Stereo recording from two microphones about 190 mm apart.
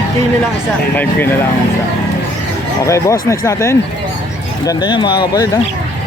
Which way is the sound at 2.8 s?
15° left (ahead or behind).